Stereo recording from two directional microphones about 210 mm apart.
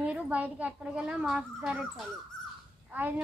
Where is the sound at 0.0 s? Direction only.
5° right (ahead or behind).